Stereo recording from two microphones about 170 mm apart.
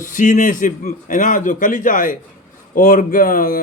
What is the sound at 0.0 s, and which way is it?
A man's voice, 50° left (ahead or behind).